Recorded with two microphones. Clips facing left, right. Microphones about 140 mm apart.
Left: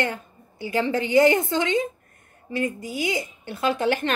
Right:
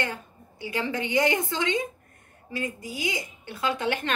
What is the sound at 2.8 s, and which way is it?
A woman's voice, 25° left (ahead or behind).